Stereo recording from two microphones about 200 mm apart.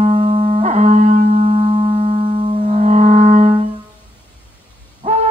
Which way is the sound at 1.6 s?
20° right (ahead or behind).